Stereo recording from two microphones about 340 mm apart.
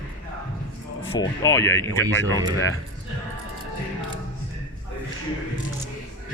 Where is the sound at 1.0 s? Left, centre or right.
Centre.